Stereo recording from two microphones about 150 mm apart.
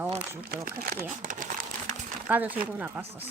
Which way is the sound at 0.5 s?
75° right (ahead or behind).